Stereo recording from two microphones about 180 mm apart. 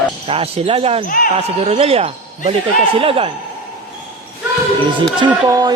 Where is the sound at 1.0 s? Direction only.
50° left (ahead or behind).